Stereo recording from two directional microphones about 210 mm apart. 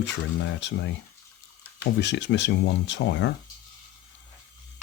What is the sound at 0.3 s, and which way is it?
Speech, 60° left (ahead or behind).